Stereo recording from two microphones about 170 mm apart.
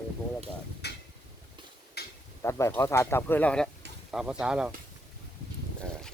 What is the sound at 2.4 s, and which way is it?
Speech, 15° left (ahead or behind).